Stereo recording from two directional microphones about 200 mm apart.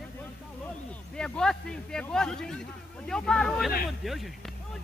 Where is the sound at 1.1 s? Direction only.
5° left (ahead or behind).